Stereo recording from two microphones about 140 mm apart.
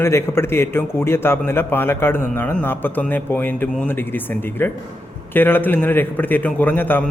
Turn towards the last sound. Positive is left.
turn(degrees=15)  # may be behind; listen again after turning